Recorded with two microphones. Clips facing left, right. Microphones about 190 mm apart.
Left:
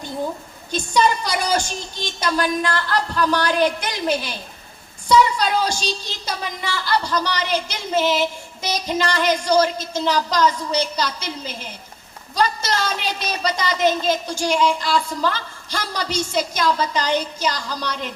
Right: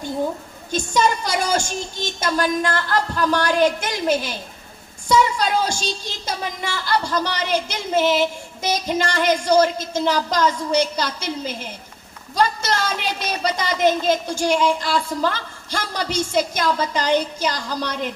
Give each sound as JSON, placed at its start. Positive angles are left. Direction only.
{"t": 0.7, "sound": "a woman's voice", "side_deg": -50}
{"t": 5.6, "sound": "a woman's voice", "side_deg": -50}